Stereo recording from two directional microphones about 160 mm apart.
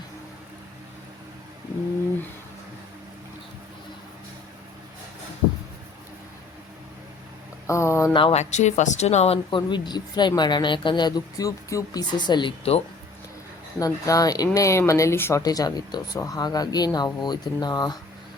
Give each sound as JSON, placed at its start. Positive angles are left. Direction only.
{"t": 7.7, "sound": "a sound", "side_deg": 20}
{"t": 8.1, "sound": "speech", "side_deg": 35}
{"t": 13.7, "sound": "speech", "side_deg": 20}